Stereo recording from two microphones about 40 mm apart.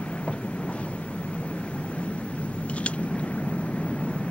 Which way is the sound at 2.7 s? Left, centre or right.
Left.